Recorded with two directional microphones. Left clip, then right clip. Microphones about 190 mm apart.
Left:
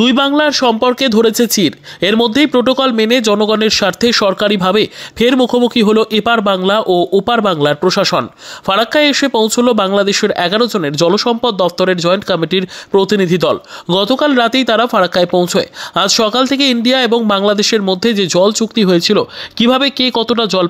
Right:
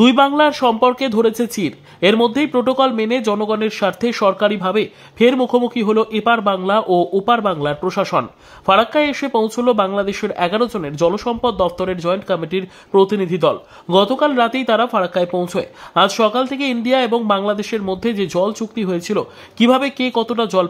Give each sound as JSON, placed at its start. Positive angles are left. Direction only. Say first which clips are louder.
{"t": 0.0, "sound": "speech", "louder": "left 1 dB", "side_deg": 20}